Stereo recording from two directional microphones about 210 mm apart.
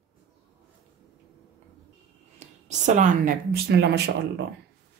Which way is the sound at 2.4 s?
35° right (ahead or behind).